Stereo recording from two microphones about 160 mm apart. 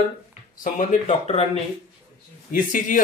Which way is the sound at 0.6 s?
55° left (ahead or behind).